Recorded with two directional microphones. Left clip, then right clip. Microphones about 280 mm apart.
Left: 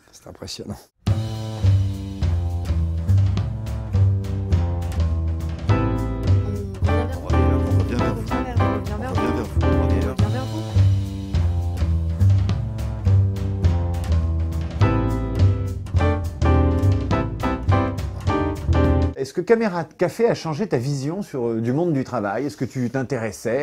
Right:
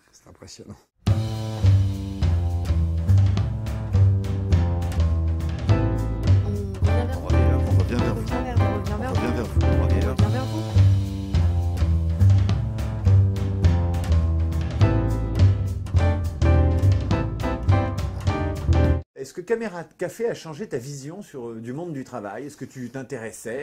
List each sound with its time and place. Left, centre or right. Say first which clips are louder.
5.7 s music: left 3 dB; centre
13.6 s music: right 1 dB; centre
19.1 s speech: left 10 dB; left